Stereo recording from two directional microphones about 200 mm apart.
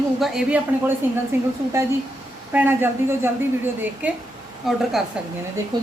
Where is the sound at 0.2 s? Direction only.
Centre (ahead or behind).